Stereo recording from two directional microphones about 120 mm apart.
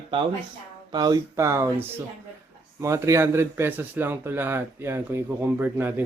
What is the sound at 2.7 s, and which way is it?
Speech, 25° right (ahead or behind).